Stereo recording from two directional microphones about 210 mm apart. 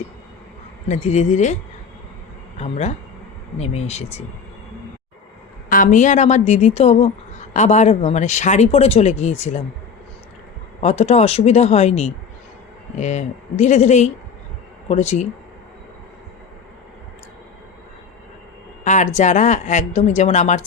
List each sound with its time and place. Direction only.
0.9 s speech: 35° left (ahead or behind)
2.6 s speech: 30° left (ahead or behind)
5.6 s speech: 40° left (ahead or behind)
10.8 s speech: 30° left (ahead or behind)
18.9 s speech: 35° left (ahead or behind)